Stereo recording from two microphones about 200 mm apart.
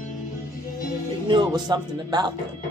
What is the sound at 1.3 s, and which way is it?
Speech, 20° right (ahead or behind).